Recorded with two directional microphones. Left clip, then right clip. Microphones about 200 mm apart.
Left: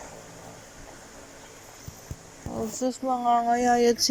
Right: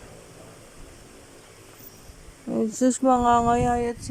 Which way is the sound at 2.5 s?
30° right (ahead or behind).